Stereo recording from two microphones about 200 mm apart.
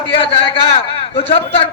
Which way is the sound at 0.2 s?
25° left (ahead or behind).